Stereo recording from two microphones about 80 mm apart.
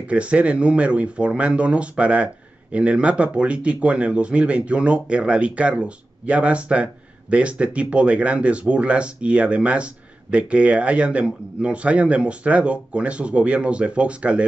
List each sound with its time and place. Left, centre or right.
0.0 s speech: centre